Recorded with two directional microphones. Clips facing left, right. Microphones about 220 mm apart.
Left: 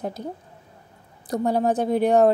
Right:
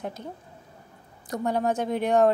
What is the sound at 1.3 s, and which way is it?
A woman's voice, 35° left (ahead or behind).